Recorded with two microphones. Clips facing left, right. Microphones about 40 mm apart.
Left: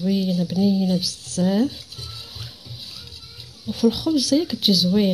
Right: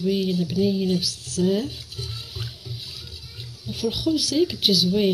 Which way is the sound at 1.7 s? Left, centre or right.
Right.